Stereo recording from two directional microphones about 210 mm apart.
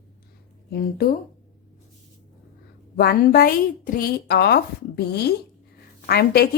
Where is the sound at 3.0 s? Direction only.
45° left (ahead or behind).